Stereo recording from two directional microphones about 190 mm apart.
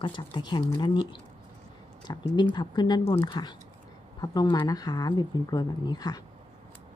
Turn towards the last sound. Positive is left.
turn(degrees=20)  # may be behind; listen again after turning